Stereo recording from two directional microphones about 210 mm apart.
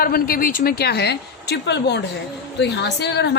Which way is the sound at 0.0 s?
45° left (ahead or behind).